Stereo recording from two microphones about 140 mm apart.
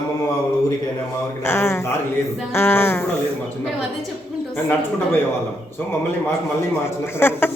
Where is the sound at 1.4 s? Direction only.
15° left (ahead or behind).